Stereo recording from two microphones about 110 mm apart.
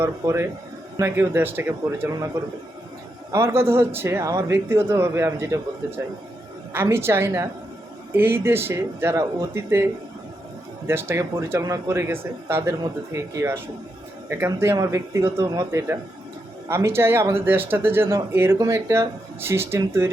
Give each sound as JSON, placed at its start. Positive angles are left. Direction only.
{"t": 0.0, "sound": "speech", "side_deg": -25}
{"t": 3.3, "sound": "speech", "side_deg": -20}
{"t": 6.7, "sound": "speech", "side_deg": -25}